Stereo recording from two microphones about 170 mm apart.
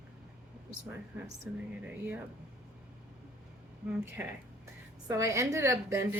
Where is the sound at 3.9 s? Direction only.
10° right (ahead or behind).